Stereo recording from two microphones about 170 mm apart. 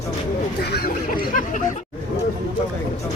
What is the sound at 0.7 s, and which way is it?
Speech, 60° left (ahead or behind).